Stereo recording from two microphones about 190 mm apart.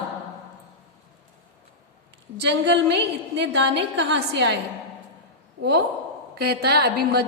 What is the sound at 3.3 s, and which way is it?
A woman's voice, 65° right (ahead or behind).